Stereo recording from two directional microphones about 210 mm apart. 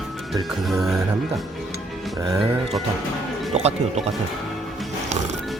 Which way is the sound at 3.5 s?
30° right (ahead or behind).